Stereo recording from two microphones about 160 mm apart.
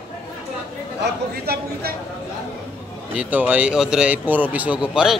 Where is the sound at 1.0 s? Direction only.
75° right (ahead or behind).